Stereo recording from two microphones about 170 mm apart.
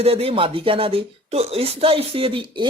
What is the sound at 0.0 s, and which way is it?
Speech, 35° right (ahead or behind).